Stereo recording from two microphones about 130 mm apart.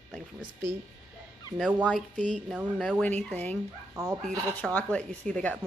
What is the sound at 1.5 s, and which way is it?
Speech, centre (ahead or behind).